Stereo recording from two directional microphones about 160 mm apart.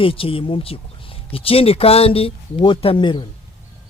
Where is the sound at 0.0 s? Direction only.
35° left (ahead or behind).